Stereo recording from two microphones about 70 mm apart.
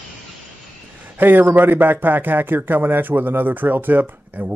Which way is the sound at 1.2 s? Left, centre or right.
Right.